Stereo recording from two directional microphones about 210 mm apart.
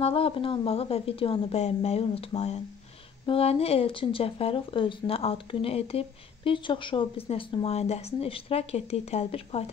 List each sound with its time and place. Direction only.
0.0 s speech: 25° left (ahead or behind)